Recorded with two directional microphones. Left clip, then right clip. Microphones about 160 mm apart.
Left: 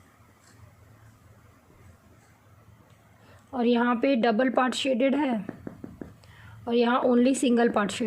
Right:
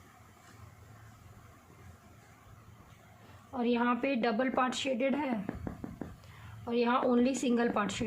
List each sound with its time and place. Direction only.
3.5 s a woman's voice: 45° left (ahead or behind)
6.7 s a woman's voice: 40° left (ahead or behind)